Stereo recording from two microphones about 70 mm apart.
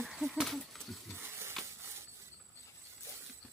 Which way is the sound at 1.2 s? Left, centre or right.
Right.